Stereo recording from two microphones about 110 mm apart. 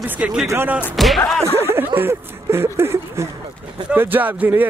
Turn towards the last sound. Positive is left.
turn(degrees=-15)  # may be behind; listen again after turning